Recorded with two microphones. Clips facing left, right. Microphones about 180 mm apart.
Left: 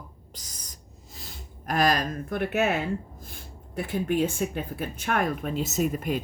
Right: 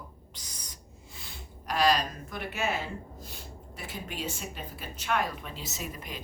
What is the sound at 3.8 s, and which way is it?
Speech, 55° left (ahead or behind).